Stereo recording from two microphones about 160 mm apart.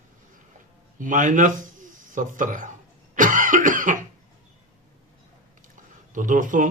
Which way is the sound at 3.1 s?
55° right (ahead or behind).